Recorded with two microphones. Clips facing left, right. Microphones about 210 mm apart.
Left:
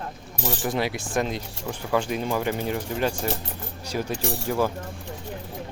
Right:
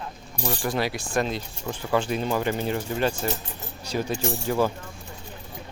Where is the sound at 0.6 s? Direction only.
20° left (ahead or behind).